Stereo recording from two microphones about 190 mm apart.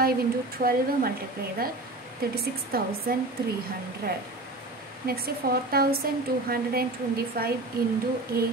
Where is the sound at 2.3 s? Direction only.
55° right (ahead or behind).